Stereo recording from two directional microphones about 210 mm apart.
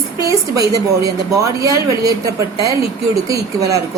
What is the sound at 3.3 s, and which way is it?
Speech, 15° right (ahead or behind).